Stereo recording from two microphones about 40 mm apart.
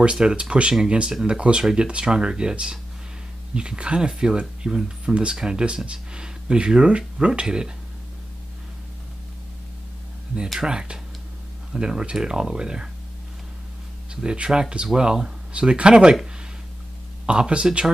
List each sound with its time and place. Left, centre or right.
0.0 s speech: right
10.6 s speech: right
14.1 s speech: right
17.3 s speech: right